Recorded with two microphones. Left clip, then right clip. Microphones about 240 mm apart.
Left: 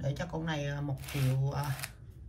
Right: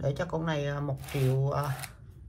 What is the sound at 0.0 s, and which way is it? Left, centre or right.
Speech, centre.